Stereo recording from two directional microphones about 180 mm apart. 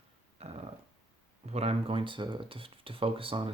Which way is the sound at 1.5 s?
35° right (ahead or behind).